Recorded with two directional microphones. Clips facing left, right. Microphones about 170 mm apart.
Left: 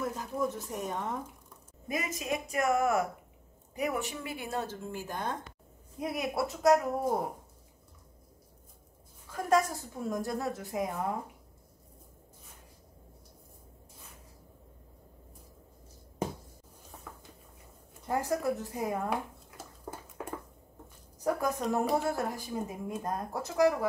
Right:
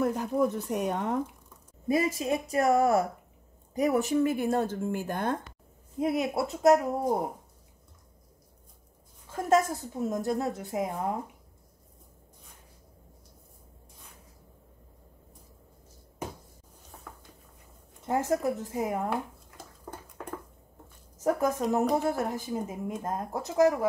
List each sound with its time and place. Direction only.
0.0 s speech: 60° right (ahead or behind)
1.9 s a woman's voice: 30° right (ahead or behind); by 5.4 s 60° right (ahead or behind)
5.9 s speech: 25° right (ahead or behind)
9.3 s speech: 20° right (ahead or behind)
16.9 s a sound: 5° left (ahead or behind)
18.0 s speech: 20° right (ahead or behind)
19.0 s a sound: 5° left (ahead or behind)
21.2 s speech: 20° right (ahead or behind)